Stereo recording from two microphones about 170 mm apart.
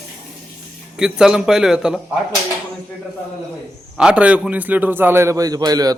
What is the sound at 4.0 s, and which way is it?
A man's voice, 5° right (ahead or behind).